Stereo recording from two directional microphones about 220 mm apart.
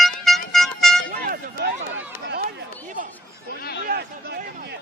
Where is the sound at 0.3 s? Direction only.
Centre (ahead or behind).